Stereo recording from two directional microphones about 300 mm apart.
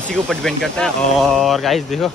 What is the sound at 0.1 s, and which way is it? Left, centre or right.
Speech, centre.